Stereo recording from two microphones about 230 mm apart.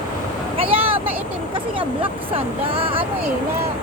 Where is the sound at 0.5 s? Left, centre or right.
Right.